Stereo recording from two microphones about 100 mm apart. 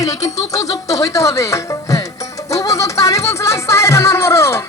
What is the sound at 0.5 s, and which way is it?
Speech, 35° left (ahead or behind).